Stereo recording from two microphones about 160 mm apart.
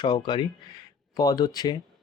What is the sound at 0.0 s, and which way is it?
Speech, 30° left (ahead or behind).